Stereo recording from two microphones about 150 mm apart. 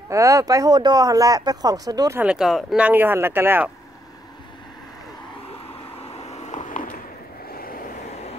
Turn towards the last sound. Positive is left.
turn(degrees=60)  # may be behind; listen again after turning